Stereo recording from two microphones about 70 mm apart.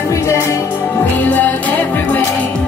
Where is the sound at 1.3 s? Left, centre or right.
Left.